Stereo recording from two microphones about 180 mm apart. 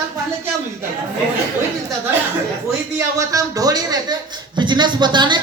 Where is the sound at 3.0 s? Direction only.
20° right (ahead or behind).